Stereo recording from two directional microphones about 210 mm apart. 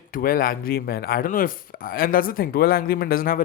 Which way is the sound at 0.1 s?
45° left (ahead or behind).